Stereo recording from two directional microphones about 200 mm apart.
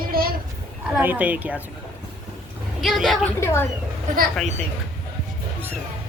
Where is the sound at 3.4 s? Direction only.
15° left (ahead or behind).